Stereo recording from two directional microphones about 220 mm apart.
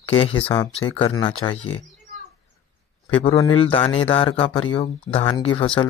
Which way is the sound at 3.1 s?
20° left (ahead or behind).